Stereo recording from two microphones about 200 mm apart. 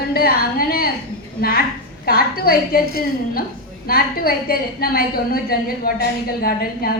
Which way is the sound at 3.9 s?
50° left (ahead or behind).